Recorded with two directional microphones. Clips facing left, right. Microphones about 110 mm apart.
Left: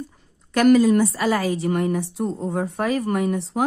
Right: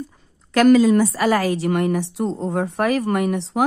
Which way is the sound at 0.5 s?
90° right.